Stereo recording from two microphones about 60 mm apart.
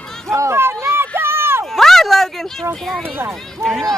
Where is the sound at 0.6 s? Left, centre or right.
Right.